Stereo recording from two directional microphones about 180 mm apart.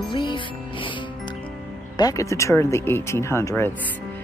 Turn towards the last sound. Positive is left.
turn(degrees=15)  # may be behind; listen again after turning